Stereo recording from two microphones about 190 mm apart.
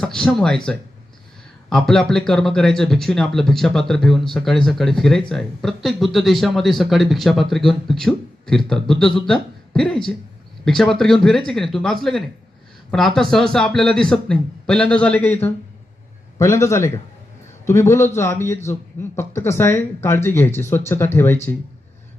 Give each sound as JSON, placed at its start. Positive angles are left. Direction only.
{"t": 0.0, "sound": "a man's voice", "side_deg": 5}